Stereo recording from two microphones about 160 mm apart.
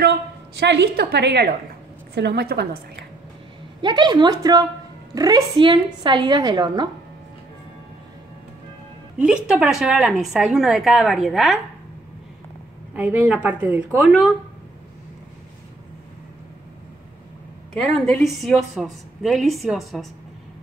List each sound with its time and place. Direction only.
0.6 s a woman's voice: 90° right
3.8 s a woman's voice: 30° right (ahead or behind)
9.2 s a woman's voice: 5° right (ahead or behind)
12.9 s a woman's voice: 10° right (ahead or behind)
17.7 s a woman's voice: 5° left (ahead or behind)